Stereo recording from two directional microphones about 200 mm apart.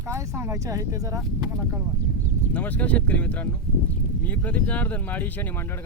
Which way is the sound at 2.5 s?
10° left (ahead or behind).